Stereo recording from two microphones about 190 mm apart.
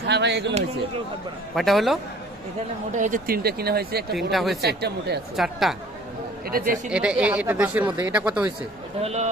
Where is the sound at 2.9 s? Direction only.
40° right (ahead or behind).